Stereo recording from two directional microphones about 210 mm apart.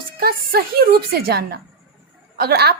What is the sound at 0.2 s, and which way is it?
A woman's voice, 45° right (ahead or behind).